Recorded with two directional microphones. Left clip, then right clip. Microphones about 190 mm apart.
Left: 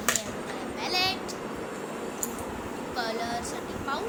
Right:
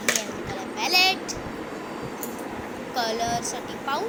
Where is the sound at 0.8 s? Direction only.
20° right (ahead or behind).